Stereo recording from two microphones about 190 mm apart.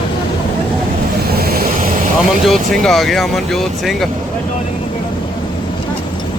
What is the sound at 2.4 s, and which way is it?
Speech, centre (ahead or behind).